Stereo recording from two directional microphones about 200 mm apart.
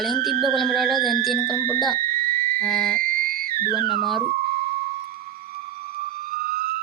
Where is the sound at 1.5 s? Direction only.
10° left (ahead or behind).